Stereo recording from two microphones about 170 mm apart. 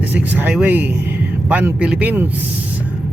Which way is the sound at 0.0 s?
10° right (ahead or behind).